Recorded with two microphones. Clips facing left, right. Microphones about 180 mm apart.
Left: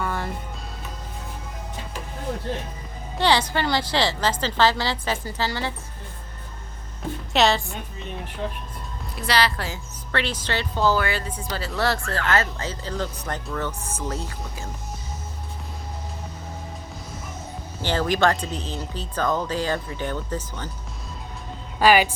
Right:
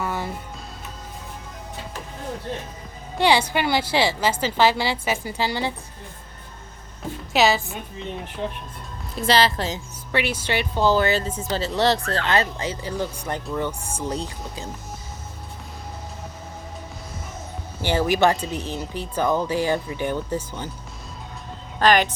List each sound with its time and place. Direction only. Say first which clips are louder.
0.0 s music: right 1 dB; 5° right (ahead or behind)
3.2 s speech: right 2 dB; 10° right (ahead or behind)
7.3 s a woman's voice: right 1 dB; 5° right (ahead or behind)
9.2 s a woman's voice: right 4 dB; 25° right (ahead or behind)
17.8 s speech: right 2 dB; 10° right (ahead or behind)
21.8 s speech: left 1 dB; 10° left (ahead or behind)